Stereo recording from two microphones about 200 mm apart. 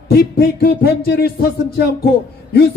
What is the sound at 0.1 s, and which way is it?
A man's voice, 50° left (ahead or behind).